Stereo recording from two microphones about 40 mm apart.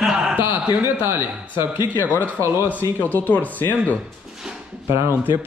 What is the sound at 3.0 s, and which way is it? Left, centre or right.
Speech, left.